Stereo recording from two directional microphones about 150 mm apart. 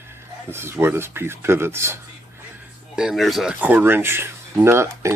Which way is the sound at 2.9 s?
5° right (ahead or behind).